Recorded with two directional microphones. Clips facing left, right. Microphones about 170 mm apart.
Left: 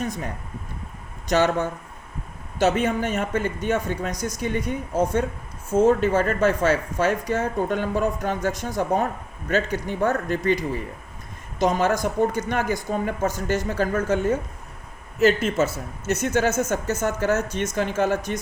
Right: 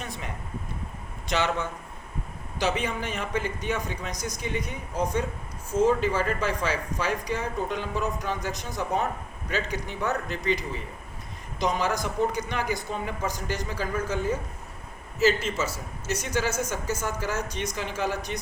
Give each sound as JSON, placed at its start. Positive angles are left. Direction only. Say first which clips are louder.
{"t": 0.0, "sound": "speech", "louder": "left 8 dB", "side_deg": 45}
{"t": 1.3, "sound": "speech", "louder": "left 7 dB", "side_deg": 45}
{"t": 4.1, "sound": "a woman's voice", "louder": "left 5 dB", "side_deg": -20}
{"t": 4.4, "sound": "speech", "louder": "left 7 dB", "side_deg": 50}
{"t": 11.6, "sound": "speech", "louder": "left 6 dB", "side_deg": 50}